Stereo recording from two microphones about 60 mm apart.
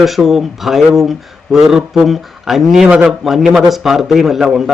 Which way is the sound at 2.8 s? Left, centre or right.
Centre.